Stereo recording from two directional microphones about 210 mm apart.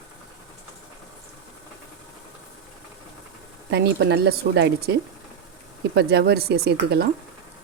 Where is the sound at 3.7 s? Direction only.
55° right (ahead or behind).